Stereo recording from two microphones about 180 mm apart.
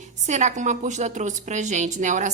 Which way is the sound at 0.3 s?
40° right (ahead or behind).